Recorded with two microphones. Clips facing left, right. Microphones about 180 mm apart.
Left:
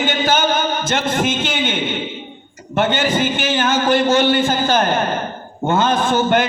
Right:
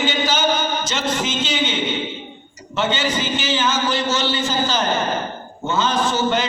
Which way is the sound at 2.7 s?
55° left (ahead or behind).